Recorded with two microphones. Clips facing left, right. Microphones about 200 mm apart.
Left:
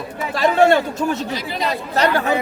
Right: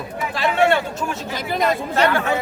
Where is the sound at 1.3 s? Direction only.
50° right (ahead or behind).